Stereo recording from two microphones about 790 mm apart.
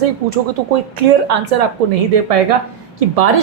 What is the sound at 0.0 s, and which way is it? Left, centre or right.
Speech, right.